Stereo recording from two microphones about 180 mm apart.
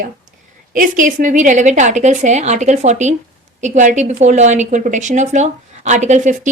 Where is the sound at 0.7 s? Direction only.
45° right (ahead or behind).